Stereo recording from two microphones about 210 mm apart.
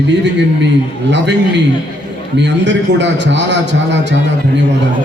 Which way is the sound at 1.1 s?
55° right (ahead or behind).